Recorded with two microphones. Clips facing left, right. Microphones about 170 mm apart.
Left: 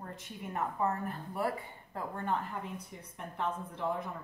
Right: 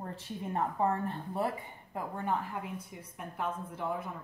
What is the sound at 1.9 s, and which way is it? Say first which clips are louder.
A woman's voice: right 1 dB; 10° right (ahead or behind).